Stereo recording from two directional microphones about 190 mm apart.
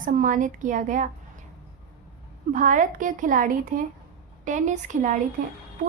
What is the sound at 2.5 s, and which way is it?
A woman's voice, 40° right (ahead or behind).